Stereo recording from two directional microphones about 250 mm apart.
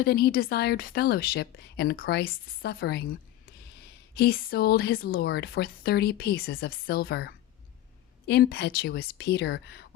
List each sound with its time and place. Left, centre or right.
0.0 s a woman's voice: left